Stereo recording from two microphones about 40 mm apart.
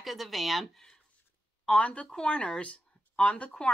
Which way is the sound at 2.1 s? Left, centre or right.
Left.